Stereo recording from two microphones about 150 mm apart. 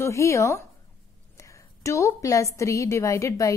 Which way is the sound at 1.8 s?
20° left (ahead or behind).